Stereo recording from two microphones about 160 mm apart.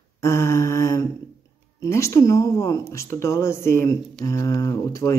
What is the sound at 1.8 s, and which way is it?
Speech, 20° left (ahead or behind).